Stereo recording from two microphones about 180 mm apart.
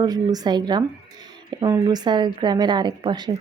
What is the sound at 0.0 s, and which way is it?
Speech, 20° right (ahead or behind).